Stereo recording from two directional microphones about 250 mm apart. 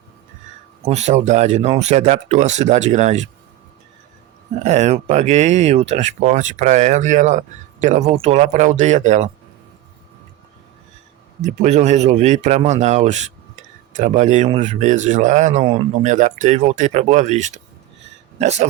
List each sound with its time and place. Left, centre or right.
0.9 s speech: right
4.6 s speech: right
11.4 s speech: right